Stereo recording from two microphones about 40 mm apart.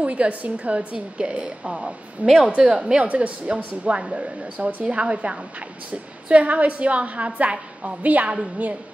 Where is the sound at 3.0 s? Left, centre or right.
Right.